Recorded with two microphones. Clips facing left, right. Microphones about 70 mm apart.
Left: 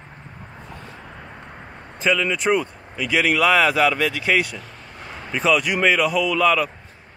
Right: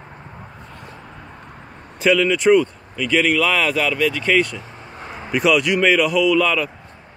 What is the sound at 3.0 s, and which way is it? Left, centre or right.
Speech, centre.